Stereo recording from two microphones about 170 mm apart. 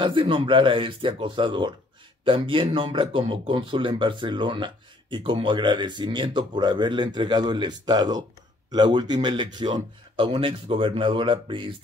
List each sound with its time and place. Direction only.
0.0 s speech: 30° right (ahead or behind)